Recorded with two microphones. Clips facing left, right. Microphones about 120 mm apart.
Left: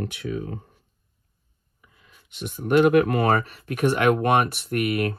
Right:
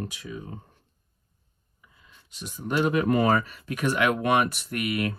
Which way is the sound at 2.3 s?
60° left (ahead or behind).